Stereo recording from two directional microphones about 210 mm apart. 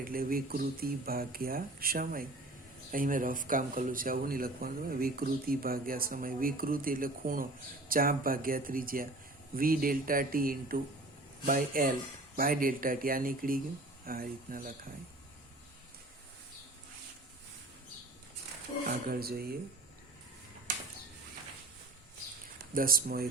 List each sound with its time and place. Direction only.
0.0 s speech: 45° right (ahead or behind)
18.9 s speech: 45° right (ahead or behind)
22.7 s speech: 45° right (ahead or behind)